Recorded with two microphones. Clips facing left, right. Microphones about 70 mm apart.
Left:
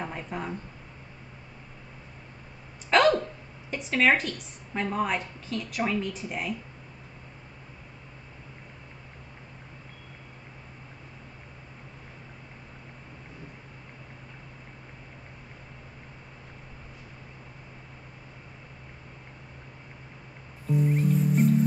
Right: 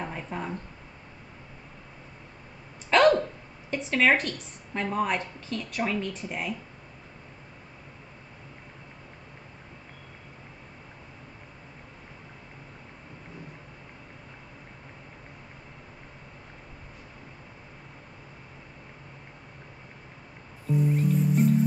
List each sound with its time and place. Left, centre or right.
0.0 s speech: centre
2.9 s a sound: centre
3.7 s a woman's voice: centre
20.9 s music: centre